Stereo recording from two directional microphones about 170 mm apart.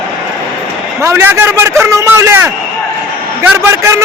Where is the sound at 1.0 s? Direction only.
15° right (ahead or behind).